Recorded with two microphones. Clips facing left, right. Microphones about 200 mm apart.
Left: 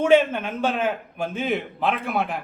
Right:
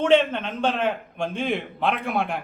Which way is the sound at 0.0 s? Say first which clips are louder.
Left 1 dB; 10° left (ahead or behind).